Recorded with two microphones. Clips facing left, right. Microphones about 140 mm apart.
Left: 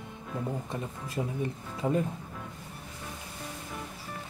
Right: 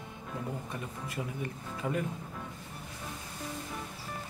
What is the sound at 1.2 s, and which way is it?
Speech, 25° left (ahead or behind).